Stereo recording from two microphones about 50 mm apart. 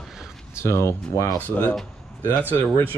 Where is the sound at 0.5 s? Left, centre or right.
Left.